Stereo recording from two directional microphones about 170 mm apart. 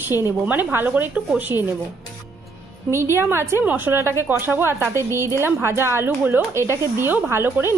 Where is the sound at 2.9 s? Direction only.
15° right (ahead or behind).